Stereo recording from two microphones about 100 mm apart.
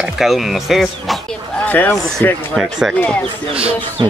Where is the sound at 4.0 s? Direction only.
60° right (ahead or behind).